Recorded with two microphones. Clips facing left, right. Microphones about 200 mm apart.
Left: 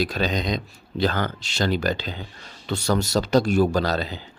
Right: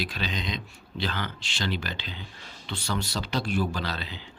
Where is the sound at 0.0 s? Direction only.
45° left (ahead or behind).